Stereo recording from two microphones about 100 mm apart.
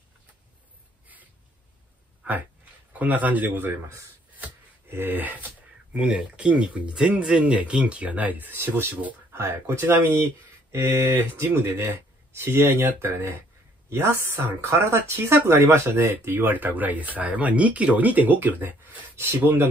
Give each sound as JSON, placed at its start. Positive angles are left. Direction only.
{"t": 2.2, "sound": "a sound", "side_deg": -15}
{"t": 2.9, "sound": "speech", "side_deg": -15}
{"t": 4.9, "sound": "speech", "side_deg": -20}